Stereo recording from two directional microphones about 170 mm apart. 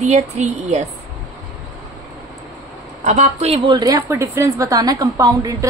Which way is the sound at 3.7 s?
20° right (ahead or behind).